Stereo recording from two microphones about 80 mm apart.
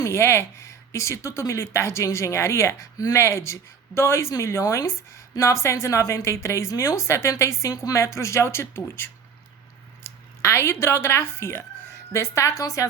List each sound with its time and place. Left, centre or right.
0.0 s speech: left